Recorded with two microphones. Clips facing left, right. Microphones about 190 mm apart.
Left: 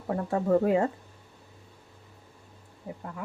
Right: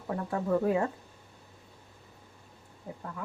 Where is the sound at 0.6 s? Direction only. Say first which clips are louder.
Left 3 dB; 20° left (ahead or behind).